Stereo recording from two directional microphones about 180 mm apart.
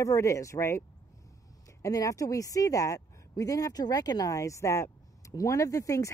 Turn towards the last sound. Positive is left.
turn(degrees=15)  # may be behind; listen again after turning